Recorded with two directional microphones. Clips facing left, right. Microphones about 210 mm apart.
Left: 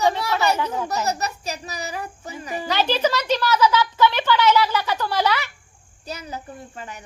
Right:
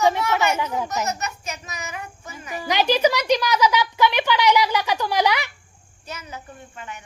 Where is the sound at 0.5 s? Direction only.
10° right (ahead or behind).